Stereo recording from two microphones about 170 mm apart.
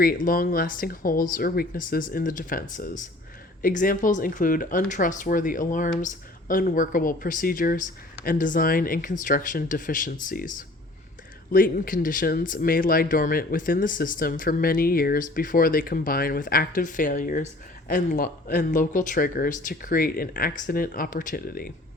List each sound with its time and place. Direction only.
0.0 s speech: 55° left (ahead or behind)
11.5 s speech: 55° left (ahead or behind)